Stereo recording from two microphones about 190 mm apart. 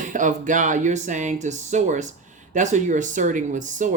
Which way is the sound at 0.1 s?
40° right (ahead or behind).